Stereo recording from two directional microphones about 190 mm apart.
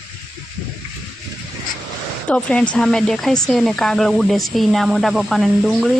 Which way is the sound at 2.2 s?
5° left (ahead or behind).